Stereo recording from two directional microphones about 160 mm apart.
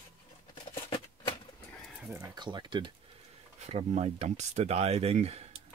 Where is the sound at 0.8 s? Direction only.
30° left (ahead or behind).